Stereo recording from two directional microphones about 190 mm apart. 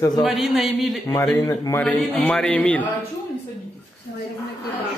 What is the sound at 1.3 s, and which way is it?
A man's voice, 15° left (ahead or behind).